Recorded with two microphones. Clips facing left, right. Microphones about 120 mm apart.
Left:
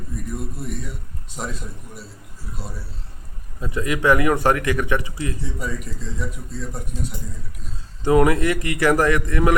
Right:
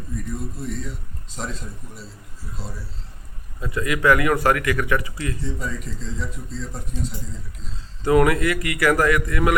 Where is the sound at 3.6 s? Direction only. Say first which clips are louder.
Even; 20° left (ahead or behind).